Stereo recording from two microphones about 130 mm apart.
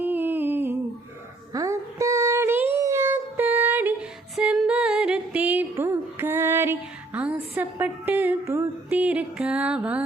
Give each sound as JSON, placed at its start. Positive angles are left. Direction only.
{"t": 0.0, "sound": "humming", "side_deg": -15}
{"t": 1.5, "sound": "child singing", "side_deg": -25}
{"t": 4.4, "sound": "music", "side_deg": -5}